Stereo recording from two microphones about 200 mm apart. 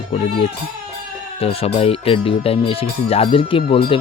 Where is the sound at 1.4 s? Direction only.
30° left (ahead or behind).